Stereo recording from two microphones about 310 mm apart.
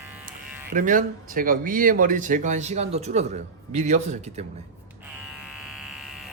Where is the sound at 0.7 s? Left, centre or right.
Right.